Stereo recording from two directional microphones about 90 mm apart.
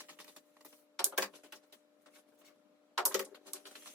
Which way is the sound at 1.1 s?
20° right (ahead or behind).